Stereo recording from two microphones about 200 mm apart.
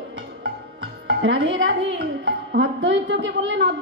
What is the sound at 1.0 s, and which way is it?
A woman's voice, 65° right (ahead or behind).